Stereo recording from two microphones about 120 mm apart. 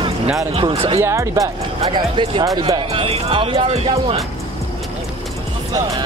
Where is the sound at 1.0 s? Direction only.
25° right (ahead or behind).